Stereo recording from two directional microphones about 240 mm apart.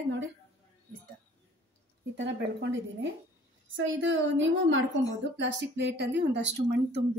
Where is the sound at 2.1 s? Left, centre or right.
Right.